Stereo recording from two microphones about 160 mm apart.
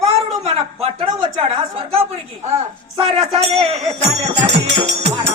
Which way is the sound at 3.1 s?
40° right (ahead or behind).